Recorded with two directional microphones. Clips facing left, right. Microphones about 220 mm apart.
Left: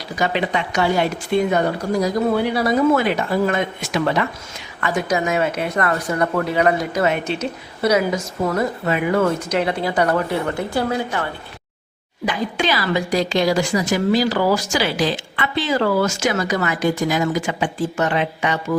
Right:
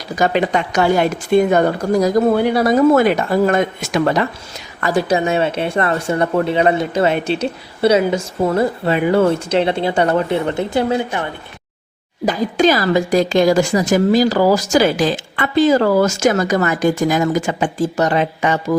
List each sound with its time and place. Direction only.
0.2 s a woman's voice: 45° right (ahead or behind); by 11.3 s 20° right (ahead or behind)
12.2 s a woman's voice: 40° right (ahead or behind)